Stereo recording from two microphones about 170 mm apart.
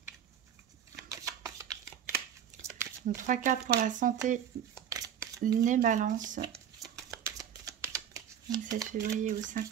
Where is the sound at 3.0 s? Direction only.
50° right (ahead or behind).